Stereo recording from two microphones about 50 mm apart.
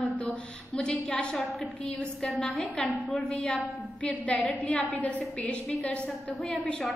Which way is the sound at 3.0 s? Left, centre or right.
Left.